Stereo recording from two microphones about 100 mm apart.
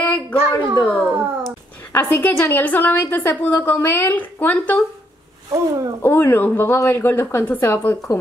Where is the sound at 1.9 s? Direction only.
20° left (ahead or behind).